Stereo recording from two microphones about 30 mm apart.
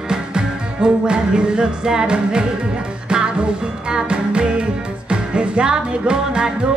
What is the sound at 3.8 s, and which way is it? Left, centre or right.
Music, right.